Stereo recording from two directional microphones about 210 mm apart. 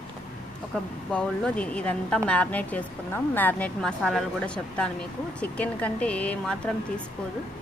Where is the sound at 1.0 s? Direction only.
5° left (ahead or behind).